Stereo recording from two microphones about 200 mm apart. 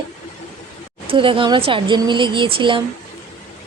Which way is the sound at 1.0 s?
25° right (ahead or behind).